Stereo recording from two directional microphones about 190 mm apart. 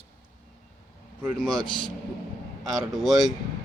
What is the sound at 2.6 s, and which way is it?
Speech, centre (ahead or behind).